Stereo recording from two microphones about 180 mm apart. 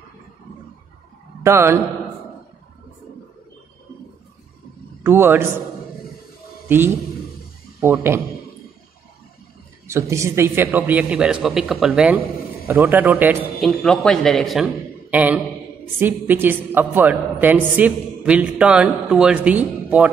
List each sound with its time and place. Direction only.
1.4 s speech: 15° right (ahead or behind)
5.0 s a woman's voice: 10° right (ahead or behind)
7.8 s a woman's voice: 15° right (ahead or behind)
9.8 s a woman's voice: 15° right (ahead or behind)
13.6 s a man's voice: 5° left (ahead or behind)